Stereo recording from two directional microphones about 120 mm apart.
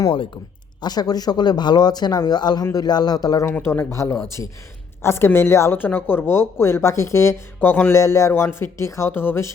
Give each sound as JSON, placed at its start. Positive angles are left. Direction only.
{"t": 0.8, "sound": "speech", "side_deg": 35}
{"t": 3.4, "sound": "speech", "side_deg": 20}